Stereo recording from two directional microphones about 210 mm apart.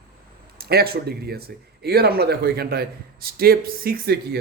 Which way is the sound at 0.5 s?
45° right (ahead or behind).